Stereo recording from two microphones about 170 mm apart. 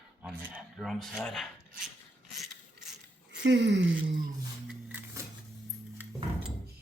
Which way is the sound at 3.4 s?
90° right.